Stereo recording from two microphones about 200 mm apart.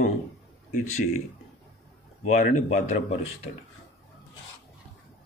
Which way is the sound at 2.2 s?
40° left (ahead or behind).